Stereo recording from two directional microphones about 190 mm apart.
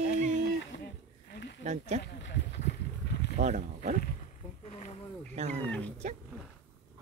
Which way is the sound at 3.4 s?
40° right (ahead or behind).